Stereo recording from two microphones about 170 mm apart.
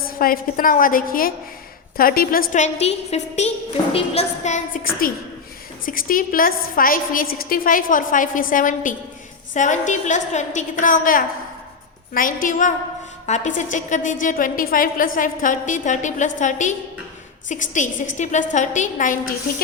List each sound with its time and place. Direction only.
0.1 s a woman's voice: 55° left (ahead or behind)